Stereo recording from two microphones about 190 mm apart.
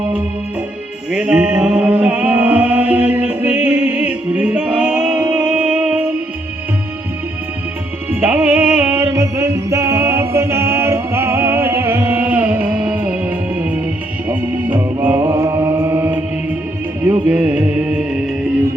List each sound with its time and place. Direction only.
1.1 s music: 5° right (ahead or behind)
8.1 s music: 10° right (ahead or behind)
17.3 s music: 10° right (ahead or behind)